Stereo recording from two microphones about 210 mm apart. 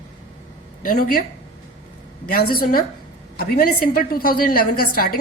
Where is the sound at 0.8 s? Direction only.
45° left (ahead or behind).